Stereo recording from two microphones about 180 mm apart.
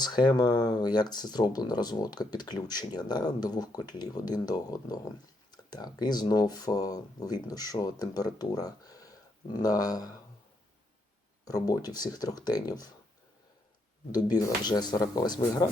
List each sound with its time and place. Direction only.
0.0 s speech: 25° left (ahead or behind)
11.4 s speech: 20° left (ahead or behind)
14.1 s speech: 20° left (ahead or behind)